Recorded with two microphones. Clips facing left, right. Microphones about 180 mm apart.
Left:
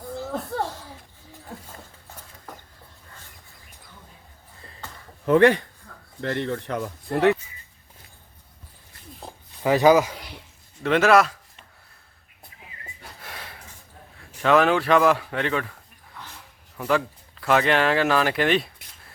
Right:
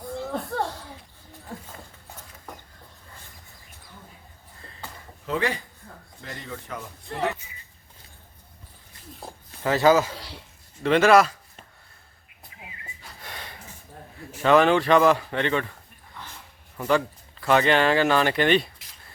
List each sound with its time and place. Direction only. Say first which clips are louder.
0.0 s a sound: even; 5° left (ahead or behind)
5.2 s speech: left 11 dB; 60° left (ahead or behind)
9.6 s speech: left 2 dB; 15° left (ahead or behind)
10.8 s speech: right 1 dB; centre (ahead or behind)
13.2 s a sound: right 1 dB; centre (ahead or behind)
17.4 s speech: even; centre (ahead or behind)